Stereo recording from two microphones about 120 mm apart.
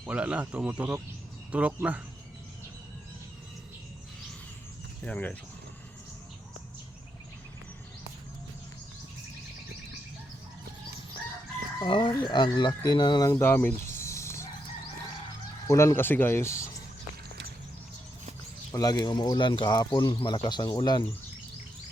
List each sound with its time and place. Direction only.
0.0 s speech: 10° right (ahead or behind)
5.0 s speech: 10° left (ahead or behind)
11.8 s speech: 40° left (ahead or behind); by 14.4 s 25° left (ahead or behind)
15.6 s speech: 25° left (ahead or behind)
18.7 s speech: 30° left (ahead or behind)